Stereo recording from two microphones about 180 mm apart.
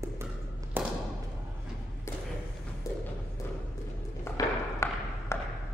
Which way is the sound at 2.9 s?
15° left (ahead or behind).